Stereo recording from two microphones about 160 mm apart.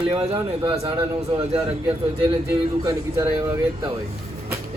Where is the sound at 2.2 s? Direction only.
25° right (ahead or behind).